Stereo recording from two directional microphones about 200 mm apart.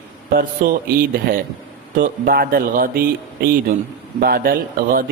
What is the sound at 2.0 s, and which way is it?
A man's voice, 45° right (ahead or behind).